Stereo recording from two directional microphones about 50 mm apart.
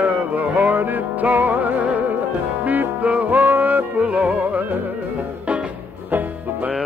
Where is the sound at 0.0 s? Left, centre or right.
Right.